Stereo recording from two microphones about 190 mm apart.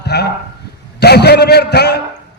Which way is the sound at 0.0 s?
60° left (ahead or behind).